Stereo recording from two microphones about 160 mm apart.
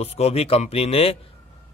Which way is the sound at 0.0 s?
40° left (ahead or behind).